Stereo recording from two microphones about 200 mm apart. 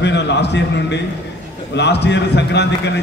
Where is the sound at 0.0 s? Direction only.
60° left (ahead or behind).